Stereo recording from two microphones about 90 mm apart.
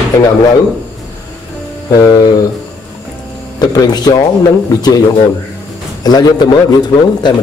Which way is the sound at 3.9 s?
50° left (ahead or behind).